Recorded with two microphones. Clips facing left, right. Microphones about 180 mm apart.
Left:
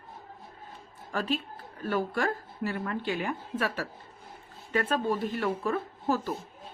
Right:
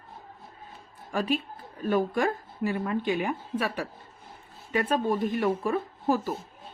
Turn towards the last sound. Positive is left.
turn(degrees=-15)  # may be behind; listen again after turning